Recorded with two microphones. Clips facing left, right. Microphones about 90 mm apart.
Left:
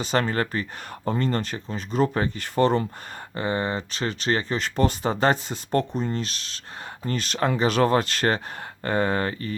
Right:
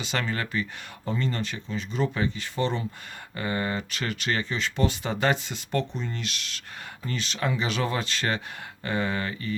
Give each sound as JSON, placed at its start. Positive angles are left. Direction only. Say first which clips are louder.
{"t": 0.0, "sound": "speech", "louder": "left 6 dB", "side_deg": 40}
{"t": 3.3, "sound": "speech", "louder": "left 3 dB", "side_deg": 30}
{"t": 7.1, "sound": "speech", "louder": "left 5 dB", "side_deg": 45}